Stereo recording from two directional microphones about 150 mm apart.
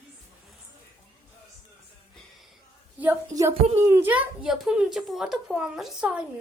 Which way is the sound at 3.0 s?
15° right (ahead or behind).